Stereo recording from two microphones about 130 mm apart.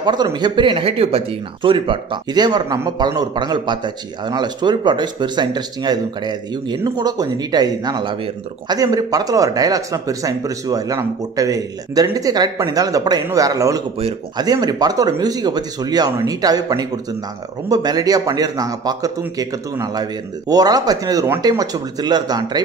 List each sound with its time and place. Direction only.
0.0 s speech: 35° right (ahead or behind)